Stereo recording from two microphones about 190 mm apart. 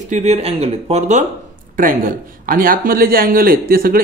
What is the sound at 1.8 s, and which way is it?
Speech, 50° right (ahead or behind).